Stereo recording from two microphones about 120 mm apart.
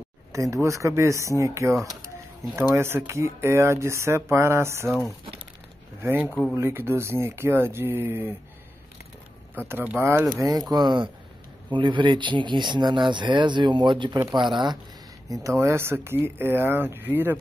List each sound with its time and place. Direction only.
0.3 s speech: 25° right (ahead or behind)
6.0 s speech: 15° right (ahead or behind)
9.6 s speech: 15° right (ahead or behind)
10.7 s speech: 35° right (ahead or behind)
15.2 s speech: 25° right (ahead or behind)